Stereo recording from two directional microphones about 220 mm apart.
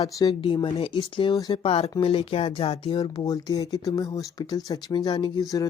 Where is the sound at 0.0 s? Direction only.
20° left (ahead or behind).